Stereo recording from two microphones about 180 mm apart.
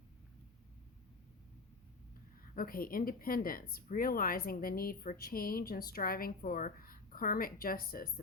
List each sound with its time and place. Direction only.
2.6 s a woman's voice: 55° left (ahead or behind)